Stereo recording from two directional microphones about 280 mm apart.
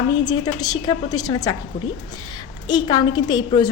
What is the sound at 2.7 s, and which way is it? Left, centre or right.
A woman's voice, centre.